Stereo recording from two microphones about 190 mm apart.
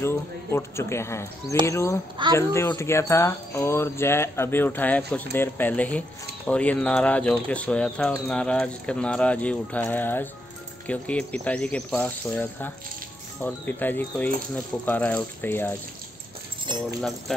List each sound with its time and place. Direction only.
0.0 s speech: 15° left (ahead or behind)